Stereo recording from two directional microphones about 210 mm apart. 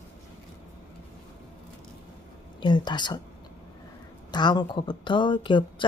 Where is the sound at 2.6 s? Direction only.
20° left (ahead or behind).